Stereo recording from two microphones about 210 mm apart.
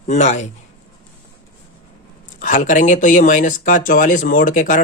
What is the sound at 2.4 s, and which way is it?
Speech, 35° left (ahead or behind).